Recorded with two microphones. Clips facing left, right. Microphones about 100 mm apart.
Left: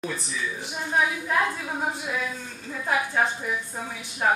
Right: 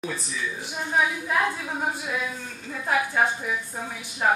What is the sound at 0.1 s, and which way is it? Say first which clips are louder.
A woman's voice: even; centre (ahead or behind).